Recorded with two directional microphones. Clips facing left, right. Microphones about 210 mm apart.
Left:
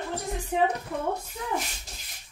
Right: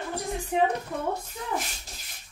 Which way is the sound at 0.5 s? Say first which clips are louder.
Even; centre (ahead or behind).